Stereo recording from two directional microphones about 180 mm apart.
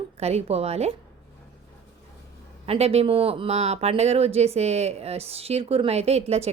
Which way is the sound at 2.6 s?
35° right (ahead or behind).